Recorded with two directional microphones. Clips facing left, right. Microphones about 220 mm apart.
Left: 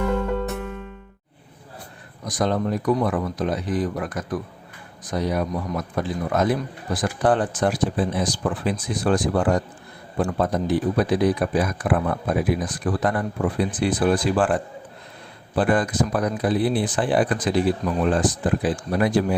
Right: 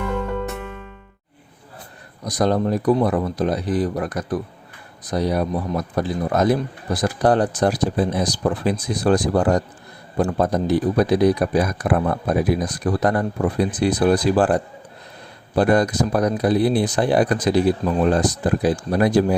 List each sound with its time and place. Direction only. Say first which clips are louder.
2.2 s a man's voice: right 4 dB; 40° right (ahead or behind)